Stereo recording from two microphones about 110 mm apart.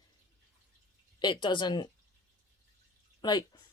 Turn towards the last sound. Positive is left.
turn(degrees=40)  # may be behind; listen again after turning